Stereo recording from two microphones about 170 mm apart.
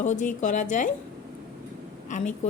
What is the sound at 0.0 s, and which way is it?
Speech, 45° left (ahead or behind).